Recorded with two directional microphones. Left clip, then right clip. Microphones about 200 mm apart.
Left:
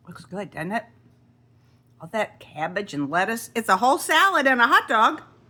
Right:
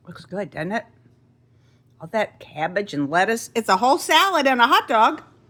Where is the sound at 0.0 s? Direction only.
15° right (ahead or behind).